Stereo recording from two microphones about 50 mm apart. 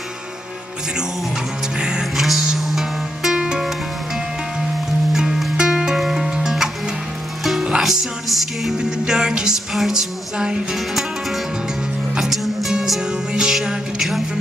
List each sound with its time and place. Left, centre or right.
1.8 s music: centre
2.1 s music: centre
5.1 s music: centre
7.8 s music: centre
8.7 s music: centre
12.2 s speech: centre
13.0 s music: centre